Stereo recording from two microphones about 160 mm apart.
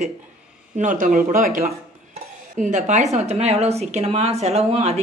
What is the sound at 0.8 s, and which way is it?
A woman's voice, 50° right (ahead or behind).